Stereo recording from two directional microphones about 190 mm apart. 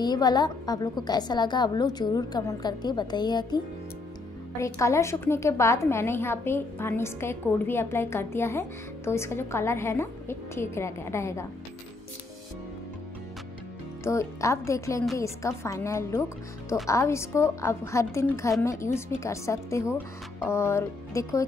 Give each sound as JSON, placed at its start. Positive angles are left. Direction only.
{"t": 0.0, "sound": "a woman's voice", "side_deg": 20}
{"t": 14.0, "sound": "a woman's voice", "side_deg": 15}